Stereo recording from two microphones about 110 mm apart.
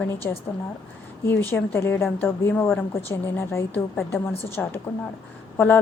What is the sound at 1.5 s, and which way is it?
A woman's voice, 20° left (ahead or behind).